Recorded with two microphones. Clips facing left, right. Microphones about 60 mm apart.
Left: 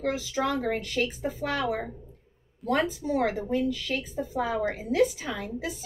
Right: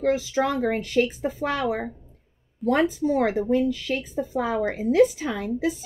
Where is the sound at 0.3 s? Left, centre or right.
Right.